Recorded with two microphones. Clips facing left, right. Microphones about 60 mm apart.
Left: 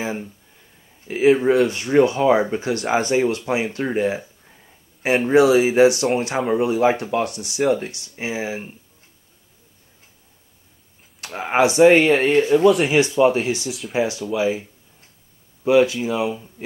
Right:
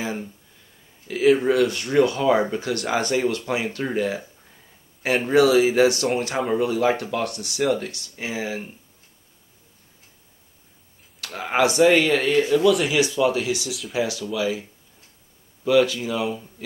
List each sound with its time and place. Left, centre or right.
1.0 s speech: left
11.1 s speech: left
13.7 s speech: centre
13.9 s speech: left
16.6 s a sound: left